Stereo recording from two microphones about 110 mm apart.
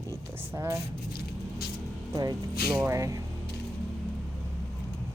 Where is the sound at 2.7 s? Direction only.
30° right (ahead or behind).